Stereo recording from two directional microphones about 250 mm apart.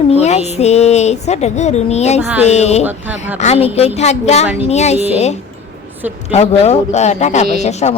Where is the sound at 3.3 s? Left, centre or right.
Left.